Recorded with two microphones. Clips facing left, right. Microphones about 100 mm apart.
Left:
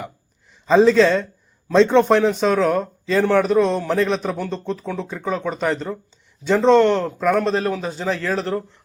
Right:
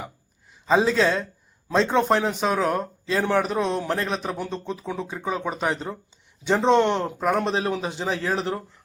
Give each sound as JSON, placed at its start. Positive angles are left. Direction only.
{"t": 0.7, "sound": "speech", "side_deg": -5}